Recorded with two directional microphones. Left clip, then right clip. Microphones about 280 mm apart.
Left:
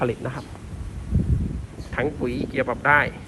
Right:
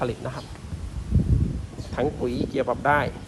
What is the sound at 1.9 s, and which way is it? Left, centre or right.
Speech, centre.